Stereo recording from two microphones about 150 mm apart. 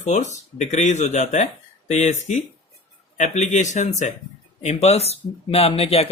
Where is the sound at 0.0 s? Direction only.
50° left (ahead or behind).